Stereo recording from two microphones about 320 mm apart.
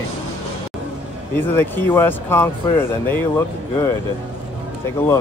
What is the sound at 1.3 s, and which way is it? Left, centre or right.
Speech, centre.